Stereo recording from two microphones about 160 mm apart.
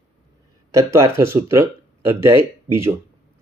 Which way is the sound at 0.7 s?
20° right (ahead or behind).